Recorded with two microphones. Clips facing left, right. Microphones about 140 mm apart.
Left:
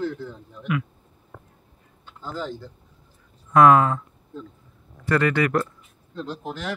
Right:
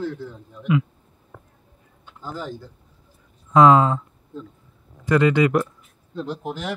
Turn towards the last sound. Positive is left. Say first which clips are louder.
# right 2 dB
turn(degrees=-15)  # may be behind; listen again after turning